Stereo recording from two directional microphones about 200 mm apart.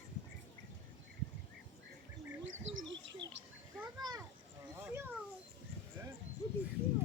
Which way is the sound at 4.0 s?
20° right (ahead or behind).